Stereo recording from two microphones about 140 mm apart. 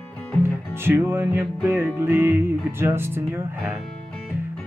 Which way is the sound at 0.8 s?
15° right (ahead or behind).